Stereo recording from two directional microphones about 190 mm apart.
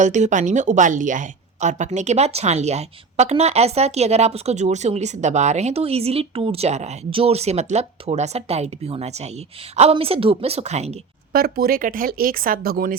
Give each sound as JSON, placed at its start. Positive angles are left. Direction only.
{"t": 0.0, "sound": "a woman's voice", "side_deg": -40}
{"t": 11.3, "sound": "speech", "side_deg": -55}